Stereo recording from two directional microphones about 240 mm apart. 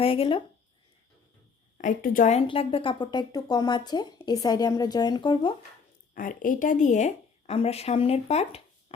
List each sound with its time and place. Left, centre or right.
0.0 s speech: left
1.8 s a woman's voice: left
6.1 s speech: left